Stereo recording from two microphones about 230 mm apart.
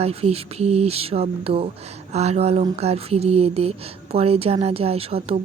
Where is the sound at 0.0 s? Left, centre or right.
Right.